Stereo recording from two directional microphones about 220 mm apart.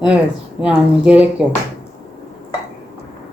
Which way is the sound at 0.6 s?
5° right (ahead or behind).